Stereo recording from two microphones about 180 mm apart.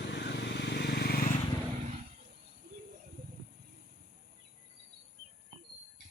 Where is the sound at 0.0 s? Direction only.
70° left (ahead or behind); by 1.4 s 50° left (ahead or behind).